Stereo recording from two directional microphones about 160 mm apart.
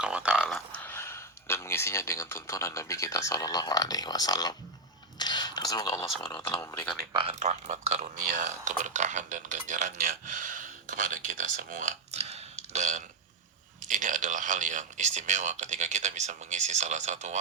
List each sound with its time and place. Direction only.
0.0 s speech: 5° right (ahead or behind); by 4.5 s 25° left (ahead or behind)
5.1 s a sound: 25° left (ahead or behind)
6.2 s speech: 25° left (ahead or behind)
7.1 s speech: 35° right (ahead or behind)